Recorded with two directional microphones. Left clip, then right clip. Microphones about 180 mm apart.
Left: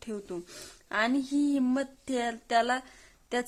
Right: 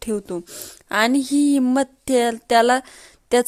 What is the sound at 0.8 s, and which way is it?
Speech, 45° right (ahead or behind).